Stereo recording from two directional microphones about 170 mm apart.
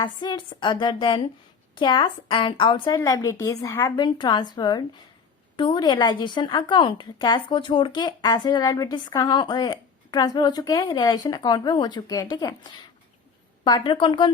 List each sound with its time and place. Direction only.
0.0 s a woman's voice: 25° left (ahead or behind)